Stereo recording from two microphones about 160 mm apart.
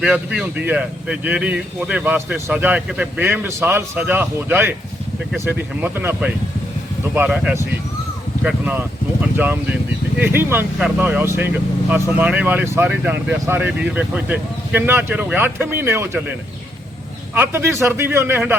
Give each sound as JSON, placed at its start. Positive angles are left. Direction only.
{"t": 0.0, "sound": "speech", "side_deg": -5}
{"t": 17.3, "sound": "speech", "side_deg": -15}